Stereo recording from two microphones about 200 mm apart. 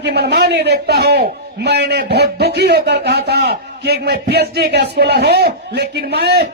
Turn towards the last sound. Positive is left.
turn(degrees=-55)  # may be behind; listen again after turning